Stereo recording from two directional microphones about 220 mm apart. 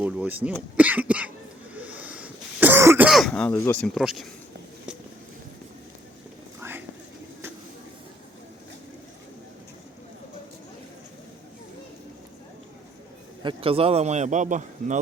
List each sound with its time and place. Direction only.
0.0 s speech: 5° right (ahead or behind)
1.8 s throat clearing: 5° right (ahead or behind)
6.6 s a sound: 10° right (ahead or behind)
13.4 s a man's voice: 25° right (ahead or behind)